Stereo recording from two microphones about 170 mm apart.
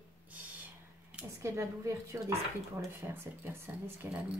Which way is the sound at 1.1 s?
15° right (ahead or behind).